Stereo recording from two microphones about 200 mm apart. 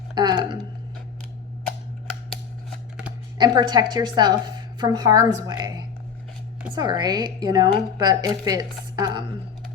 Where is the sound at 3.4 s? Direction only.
20° right (ahead or behind).